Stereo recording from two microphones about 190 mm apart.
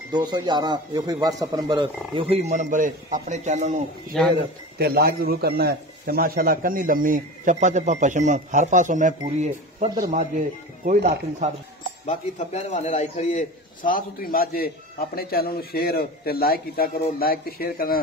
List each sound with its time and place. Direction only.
0.1 s speech: 20° right (ahead or behind); by 3.8 s 40° right (ahead or behind)
4.1 s speech: centre (ahead or behind)
4.7 s speech: 55° right (ahead or behind)
9.8 s speech: 20° right (ahead or behind)
10.1 s speech: 45° right (ahead or behind)
12.1 s a man's voice: 35° left (ahead or behind)